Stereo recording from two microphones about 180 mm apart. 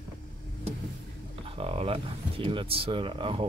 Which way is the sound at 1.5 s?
30° right (ahead or behind).